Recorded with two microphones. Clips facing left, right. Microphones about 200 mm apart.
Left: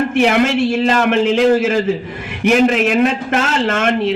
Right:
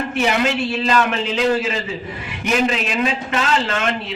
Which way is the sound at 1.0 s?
75° left (ahead or behind).